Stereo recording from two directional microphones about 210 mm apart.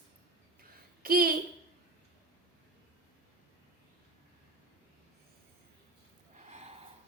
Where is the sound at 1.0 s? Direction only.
45° right (ahead or behind).